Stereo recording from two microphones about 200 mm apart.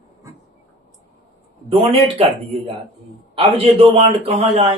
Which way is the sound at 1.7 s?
30° right (ahead or behind).